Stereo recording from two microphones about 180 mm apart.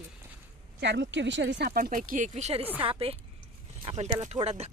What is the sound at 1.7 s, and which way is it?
Speech, 55° right (ahead or behind).